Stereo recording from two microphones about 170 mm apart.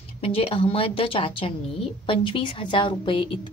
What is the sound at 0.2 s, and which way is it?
Speech, 35° left (ahead or behind).